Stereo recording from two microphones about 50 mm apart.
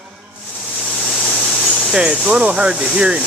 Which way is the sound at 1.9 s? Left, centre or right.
Centre.